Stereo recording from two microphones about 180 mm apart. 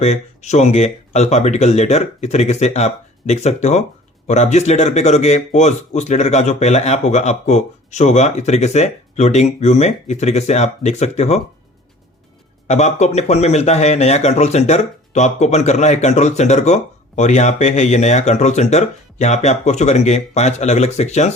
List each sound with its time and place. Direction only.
0.0 s a man's voice: 40° left (ahead or behind)
12.6 s a man's voice: 40° left (ahead or behind)